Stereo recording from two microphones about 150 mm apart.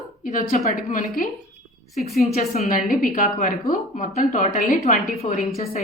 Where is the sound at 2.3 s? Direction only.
45° left (ahead or behind).